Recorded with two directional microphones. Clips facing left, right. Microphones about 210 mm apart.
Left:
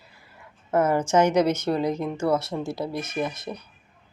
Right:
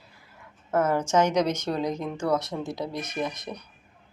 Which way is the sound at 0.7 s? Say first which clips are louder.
Left 2 dB; 10° left (ahead or behind).